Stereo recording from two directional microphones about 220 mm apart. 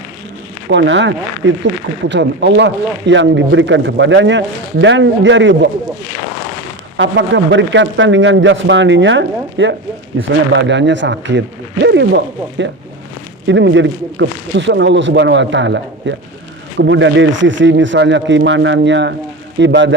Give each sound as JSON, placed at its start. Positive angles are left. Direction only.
{"t": 0.7, "sound": "speech", "side_deg": -55}
{"t": 6.9, "sound": "speech", "side_deg": -55}